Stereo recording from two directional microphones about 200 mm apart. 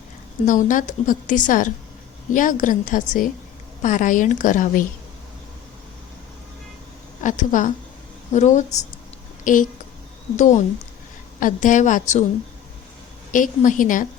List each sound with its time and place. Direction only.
0.4 s a woman's voice: 40° left (ahead or behind)
7.2 s a woman's voice: 40° left (ahead or behind)
13.3 s a woman's voice: 40° left (ahead or behind)